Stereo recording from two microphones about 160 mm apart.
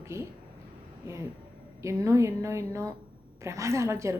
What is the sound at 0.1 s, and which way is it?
Speech, 15° right (ahead or behind).